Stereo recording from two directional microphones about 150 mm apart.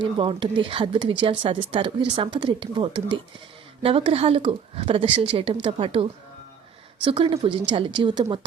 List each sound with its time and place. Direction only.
0.0 s speech: 35° right (ahead or behind)